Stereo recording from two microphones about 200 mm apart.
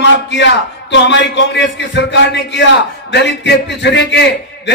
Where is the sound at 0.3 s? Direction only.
60° left (ahead or behind).